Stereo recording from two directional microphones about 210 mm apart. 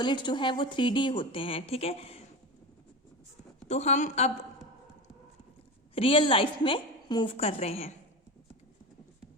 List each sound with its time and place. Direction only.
0.0 s a woman's voice: 20° left (ahead or behind)
3.7 s a woman's voice: 30° left (ahead or behind)
5.9 s a woman's voice: 25° left (ahead or behind)